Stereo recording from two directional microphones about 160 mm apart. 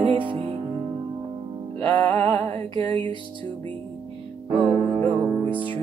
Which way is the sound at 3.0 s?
30° right (ahead or behind).